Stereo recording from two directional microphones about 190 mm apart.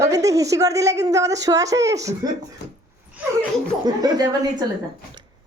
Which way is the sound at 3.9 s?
20° right (ahead or behind).